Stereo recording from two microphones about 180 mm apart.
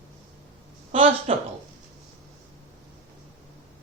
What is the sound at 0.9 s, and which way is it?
Speech, 30° right (ahead or behind).